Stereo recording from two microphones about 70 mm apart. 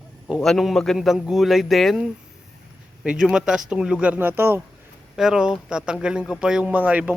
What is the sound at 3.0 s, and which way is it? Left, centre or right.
Speech, centre.